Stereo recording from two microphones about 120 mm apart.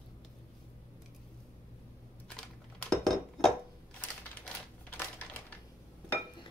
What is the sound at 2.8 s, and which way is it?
Dishes, 5° left (ahead or behind).